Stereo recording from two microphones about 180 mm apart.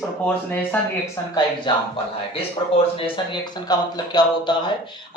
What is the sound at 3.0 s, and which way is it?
Speech, 25° left (ahead or behind).